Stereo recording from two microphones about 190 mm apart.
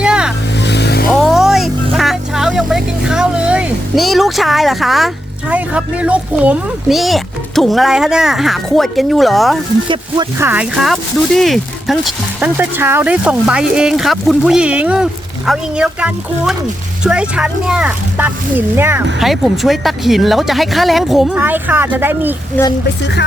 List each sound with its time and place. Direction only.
0.0 s vehicle: 5° right (ahead or behind)
0.6 s vehicle: 65° left (ahead or behind)
1.1 s music: centre (ahead or behind)
9.9 s speech: 25° right (ahead or behind)
10.4 s speech: 10° right (ahead or behind)
19.2 s speech: centre (ahead or behind)